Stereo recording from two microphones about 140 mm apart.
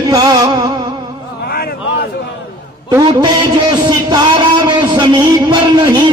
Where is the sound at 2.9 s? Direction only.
30° right (ahead or behind).